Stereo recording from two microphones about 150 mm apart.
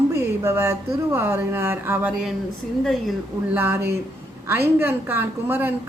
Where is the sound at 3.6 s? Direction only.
15° right (ahead or behind).